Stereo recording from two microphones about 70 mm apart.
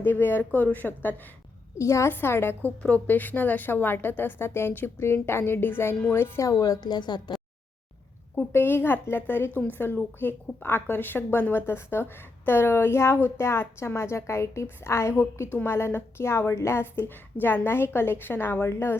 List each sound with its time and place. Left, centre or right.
0.0 s speech: left
1.8 s a woman's voice: left
2.1 s a woman's voice: left
6.7 s a woman's voice: left
8.4 s a woman's voice: left